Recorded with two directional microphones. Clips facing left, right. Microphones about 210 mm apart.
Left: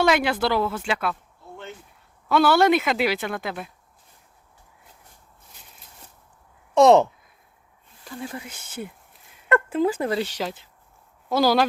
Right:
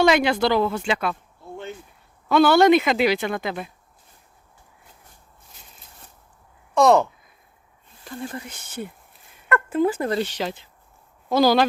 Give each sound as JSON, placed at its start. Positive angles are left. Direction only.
{"t": 0.0, "sound": "speech", "side_deg": 5}
{"t": 2.3, "sound": "speech", "side_deg": 5}
{"t": 6.7, "sound": "speech", "side_deg": 25}
{"t": 8.1, "sound": "speech", "side_deg": 5}